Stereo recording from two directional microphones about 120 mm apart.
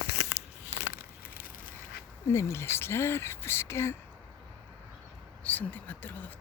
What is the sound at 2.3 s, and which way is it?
Speech, 25° left (ahead or behind).